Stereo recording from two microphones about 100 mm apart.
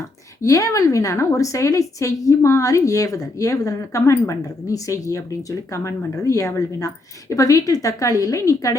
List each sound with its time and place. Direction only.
0.4 s a woman's voice: 35° left (ahead or behind)